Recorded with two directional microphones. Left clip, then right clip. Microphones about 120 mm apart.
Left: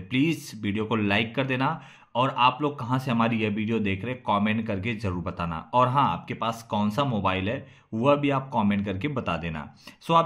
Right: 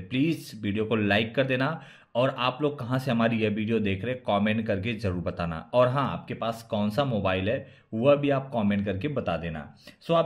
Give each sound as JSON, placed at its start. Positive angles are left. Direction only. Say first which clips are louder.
{"t": 0.1, "sound": "speech", "louder": "left 2 dB", "side_deg": 20}
{"t": 6.0, "sound": "speech", "louder": "left 4 dB", "side_deg": 20}